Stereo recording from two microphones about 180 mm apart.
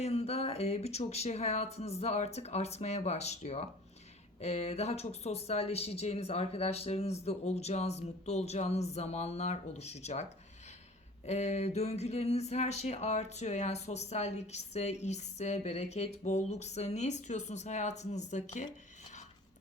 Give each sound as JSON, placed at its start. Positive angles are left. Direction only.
{"t": 0.0, "sound": "speech", "side_deg": 35}
{"t": 11.3, "sound": "speech", "side_deg": 40}